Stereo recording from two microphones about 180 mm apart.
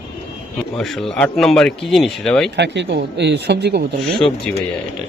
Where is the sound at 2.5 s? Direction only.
75° right (ahead or behind).